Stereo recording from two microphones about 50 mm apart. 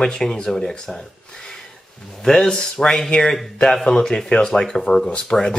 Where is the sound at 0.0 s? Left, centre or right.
Centre.